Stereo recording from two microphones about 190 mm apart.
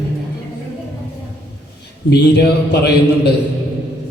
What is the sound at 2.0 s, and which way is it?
A man's voice, 60° left (ahead or behind).